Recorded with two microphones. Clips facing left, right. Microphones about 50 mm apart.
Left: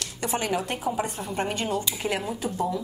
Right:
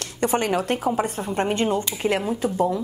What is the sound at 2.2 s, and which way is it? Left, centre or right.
Speech, centre.